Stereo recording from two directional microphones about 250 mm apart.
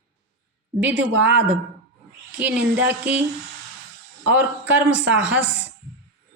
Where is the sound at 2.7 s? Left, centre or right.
Centre.